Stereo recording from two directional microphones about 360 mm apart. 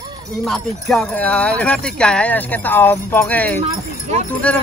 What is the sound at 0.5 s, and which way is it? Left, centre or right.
Speech, centre.